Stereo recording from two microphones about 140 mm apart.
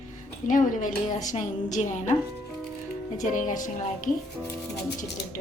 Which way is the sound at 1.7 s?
60° left (ahead or behind).